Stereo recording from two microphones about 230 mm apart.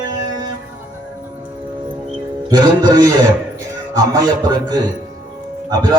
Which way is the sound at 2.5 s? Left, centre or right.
Centre.